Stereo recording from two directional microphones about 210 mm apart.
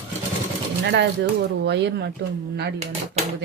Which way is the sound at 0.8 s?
55° right (ahead or behind).